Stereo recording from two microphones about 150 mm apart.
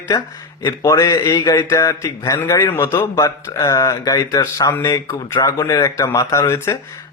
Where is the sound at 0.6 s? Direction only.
20° left (ahead or behind).